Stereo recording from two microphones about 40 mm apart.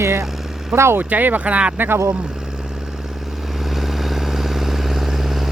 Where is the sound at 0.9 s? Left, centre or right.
Right.